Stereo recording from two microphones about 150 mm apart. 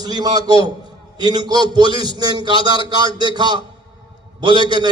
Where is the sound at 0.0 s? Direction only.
25° right (ahead or behind).